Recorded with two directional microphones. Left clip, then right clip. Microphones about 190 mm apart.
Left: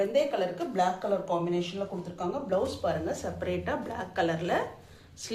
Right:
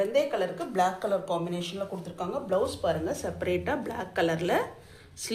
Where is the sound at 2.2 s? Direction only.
30° right (ahead or behind).